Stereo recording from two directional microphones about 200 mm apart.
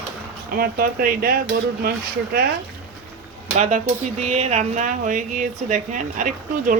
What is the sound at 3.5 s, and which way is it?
Speech, 35° right (ahead or behind).